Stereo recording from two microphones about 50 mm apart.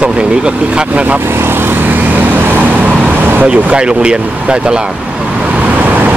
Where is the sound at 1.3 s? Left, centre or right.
Right.